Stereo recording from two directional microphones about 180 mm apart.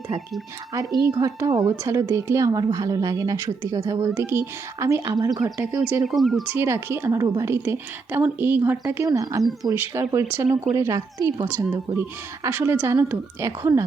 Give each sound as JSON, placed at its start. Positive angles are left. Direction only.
{"t": 0.9, "sound": "speech", "side_deg": 20}
{"t": 1.2, "sound": "a woman's voice", "side_deg": -20}
{"t": 5.4, "sound": "speech", "side_deg": -5}